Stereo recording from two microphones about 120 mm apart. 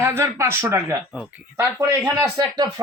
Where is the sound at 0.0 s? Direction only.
20° right (ahead or behind).